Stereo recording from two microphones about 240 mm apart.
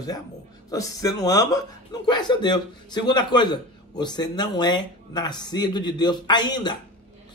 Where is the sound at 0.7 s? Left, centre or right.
Centre.